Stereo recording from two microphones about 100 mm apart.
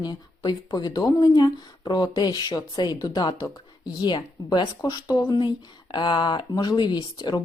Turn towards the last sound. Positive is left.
turn(degrees=45)  # may be behind; listen again after turning